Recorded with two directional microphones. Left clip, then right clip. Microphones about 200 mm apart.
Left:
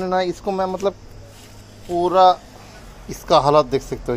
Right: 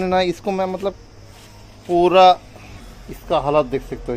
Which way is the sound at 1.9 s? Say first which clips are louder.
Right 3 dB; 20° right (ahead or behind).